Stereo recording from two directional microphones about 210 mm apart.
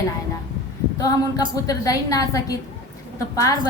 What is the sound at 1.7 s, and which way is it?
Speech, 15° left (ahead or behind).